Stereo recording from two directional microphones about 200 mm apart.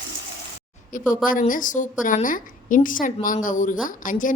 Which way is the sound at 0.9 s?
40° left (ahead or behind).